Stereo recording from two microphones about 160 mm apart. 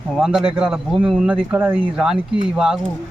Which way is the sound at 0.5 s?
5° right (ahead or behind).